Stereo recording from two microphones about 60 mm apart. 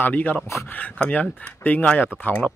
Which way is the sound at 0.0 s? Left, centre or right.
Left.